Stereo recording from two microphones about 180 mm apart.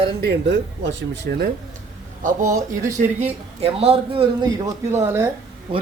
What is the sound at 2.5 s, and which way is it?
Speech, 15° right (ahead or behind).